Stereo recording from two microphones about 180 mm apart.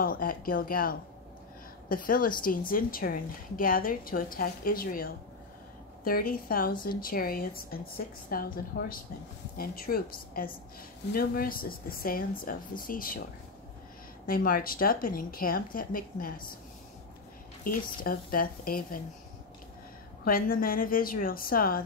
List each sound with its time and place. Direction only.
0.0 s a woman's voice: 50° left (ahead or behind)
14.2 s a woman's voice: 55° left (ahead or behind)
17.6 s a woman's voice: 55° left (ahead or behind)
20.2 s a woman's voice: 55° left (ahead or behind)